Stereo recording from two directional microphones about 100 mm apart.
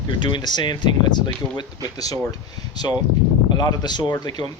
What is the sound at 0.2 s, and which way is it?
Speech, 50° left (ahead or behind).